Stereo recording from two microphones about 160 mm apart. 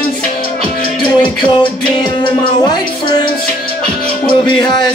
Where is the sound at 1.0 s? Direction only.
30° left (ahead or behind).